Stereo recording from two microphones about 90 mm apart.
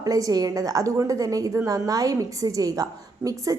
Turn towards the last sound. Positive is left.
turn(degrees=-40)  # may be behind; listen again after turning